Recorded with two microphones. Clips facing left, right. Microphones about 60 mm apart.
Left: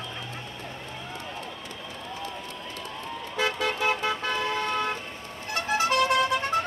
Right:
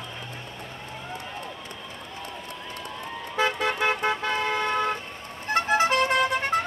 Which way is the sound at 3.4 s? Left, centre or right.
Right.